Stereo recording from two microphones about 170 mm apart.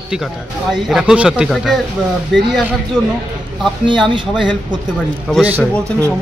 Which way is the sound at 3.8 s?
30° right (ahead or behind).